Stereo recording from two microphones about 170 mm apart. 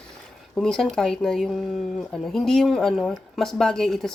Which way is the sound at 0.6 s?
5° left (ahead or behind).